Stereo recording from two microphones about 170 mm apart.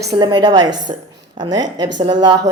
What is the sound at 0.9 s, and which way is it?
Speech, 40° right (ahead or behind).